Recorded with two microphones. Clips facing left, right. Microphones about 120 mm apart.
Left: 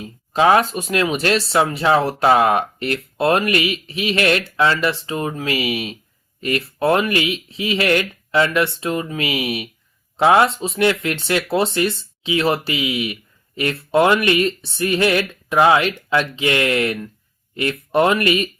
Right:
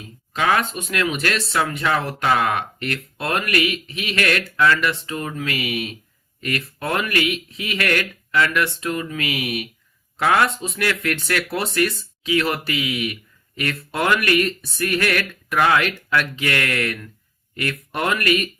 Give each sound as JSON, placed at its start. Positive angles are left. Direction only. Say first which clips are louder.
{"t": 0.0, "sound": "speech", "louder": "left 6 dB", "side_deg": 30}